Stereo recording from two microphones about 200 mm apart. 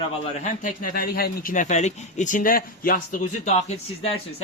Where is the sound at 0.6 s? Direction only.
45° left (ahead or behind).